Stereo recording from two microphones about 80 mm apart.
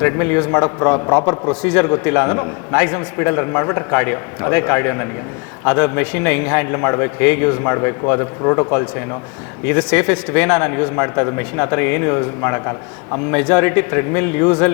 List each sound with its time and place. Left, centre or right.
0.0 s a man's voice: left
1.3 s a man's voice: left